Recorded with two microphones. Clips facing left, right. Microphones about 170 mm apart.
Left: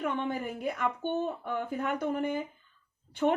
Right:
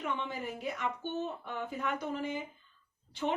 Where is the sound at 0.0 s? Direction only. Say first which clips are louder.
Left 5 dB; 55° left (ahead or behind).